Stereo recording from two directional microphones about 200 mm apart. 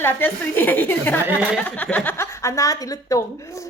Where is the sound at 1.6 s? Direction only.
10° left (ahead or behind).